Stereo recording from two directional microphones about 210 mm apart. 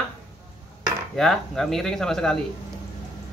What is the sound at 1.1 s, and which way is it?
A man's voice, centre (ahead or behind).